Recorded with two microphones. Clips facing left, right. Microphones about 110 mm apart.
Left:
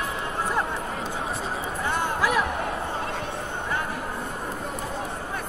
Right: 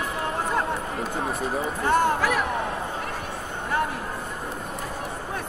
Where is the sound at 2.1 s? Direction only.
50° right (ahead or behind).